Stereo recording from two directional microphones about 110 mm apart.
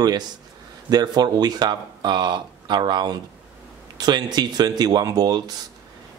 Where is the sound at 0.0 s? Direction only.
35° right (ahead or behind).